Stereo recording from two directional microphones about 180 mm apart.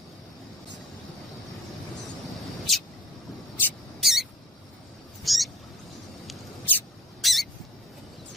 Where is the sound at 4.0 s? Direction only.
Centre (ahead or behind).